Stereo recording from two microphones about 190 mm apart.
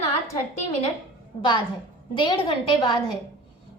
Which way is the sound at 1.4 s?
25° left (ahead or behind).